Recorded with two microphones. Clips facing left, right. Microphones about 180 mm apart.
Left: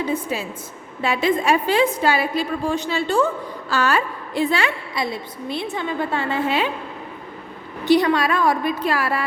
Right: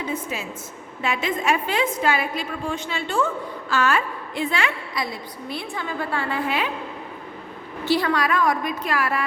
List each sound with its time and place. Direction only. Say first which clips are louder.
0.1 s a woman's voice: left 4 dB; 35° left (ahead or behind)
7.9 s a woman's voice: left 5 dB; 20° left (ahead or behind)